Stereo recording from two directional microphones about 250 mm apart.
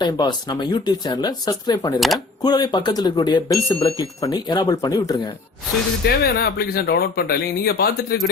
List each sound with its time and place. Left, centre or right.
0.0 s speech: centre
6.1 s speech: left